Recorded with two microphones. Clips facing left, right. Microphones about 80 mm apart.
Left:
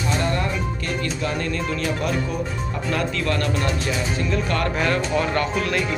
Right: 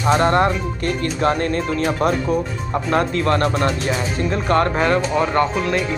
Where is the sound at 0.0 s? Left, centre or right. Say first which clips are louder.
Right 8 dB; right.